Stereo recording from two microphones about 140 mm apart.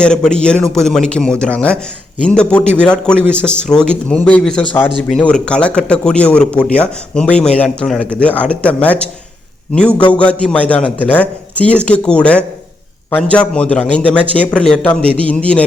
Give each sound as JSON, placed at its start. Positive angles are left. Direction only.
{"t": 0.0, "sound": "speech", "side_deg": 5}
{"t": 10.1, "sound": "speech", "side_deg": 10}